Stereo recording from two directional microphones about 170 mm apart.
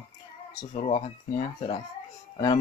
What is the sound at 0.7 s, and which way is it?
Speech, 40° left (ahead or behind).